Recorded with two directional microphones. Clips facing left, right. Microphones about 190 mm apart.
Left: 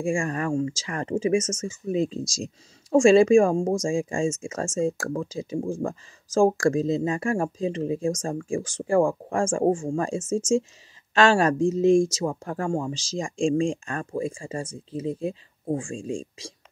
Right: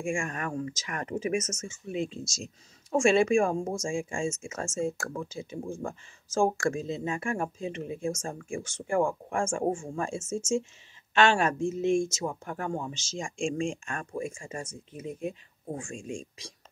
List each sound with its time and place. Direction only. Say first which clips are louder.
0.0 s speech: left 6 dB; 35° left (ahead or behind)